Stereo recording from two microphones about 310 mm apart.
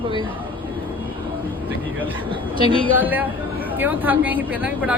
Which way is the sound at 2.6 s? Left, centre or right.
Centre.